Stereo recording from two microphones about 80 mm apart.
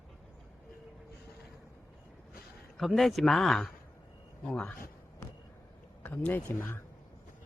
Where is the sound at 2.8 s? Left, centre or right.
Centre.